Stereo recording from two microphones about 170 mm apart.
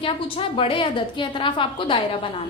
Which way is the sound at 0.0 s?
30° left (ahead or behind).